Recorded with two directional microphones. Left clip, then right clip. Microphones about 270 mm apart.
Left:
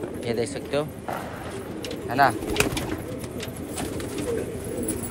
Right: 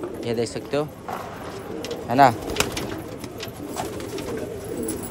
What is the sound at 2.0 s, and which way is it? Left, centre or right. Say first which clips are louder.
Speech: right 4 dB; centre.